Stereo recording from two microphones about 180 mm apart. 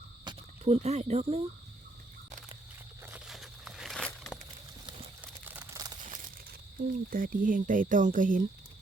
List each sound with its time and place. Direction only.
0.3 s speech: 35° right (ahead or behind)
3.0 s a sound: 10° right (ahead or behind)
5.2 s crumpling: 10° right (ahead or behind)
5.7 s crumpling: 20° right (ahead or behind)
6.1 s a sound: 45° right (ahead or behind)
6.9 s speech: 50° right (ahead or behind)